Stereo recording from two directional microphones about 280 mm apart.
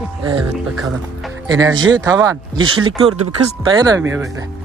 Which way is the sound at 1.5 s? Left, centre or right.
Centre.